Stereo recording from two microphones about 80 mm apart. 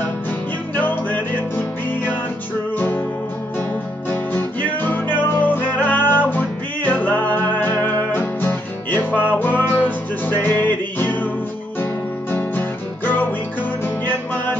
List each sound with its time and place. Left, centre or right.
0.7 s music: left
4.1 s music: left